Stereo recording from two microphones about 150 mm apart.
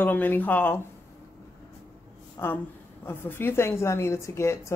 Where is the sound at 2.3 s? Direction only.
15° left (ahead or behind).